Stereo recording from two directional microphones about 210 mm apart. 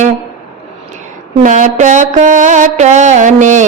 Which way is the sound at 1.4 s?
35° right (ahead or behind).